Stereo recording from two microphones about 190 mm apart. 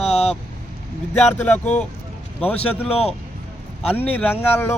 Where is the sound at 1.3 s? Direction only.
10° left (ahead or behind).